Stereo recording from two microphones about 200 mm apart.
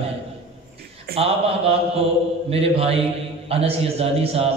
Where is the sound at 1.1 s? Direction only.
50° right (ahead or behind).